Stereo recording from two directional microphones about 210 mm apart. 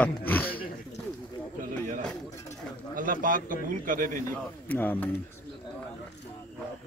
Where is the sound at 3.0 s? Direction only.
40° right (ahead or behind).